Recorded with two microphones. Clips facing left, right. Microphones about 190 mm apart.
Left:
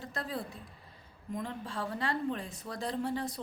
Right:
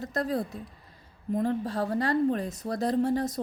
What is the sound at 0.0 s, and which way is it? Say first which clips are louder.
A woman's voice: right 9 dB; 40° right (ahead or behind).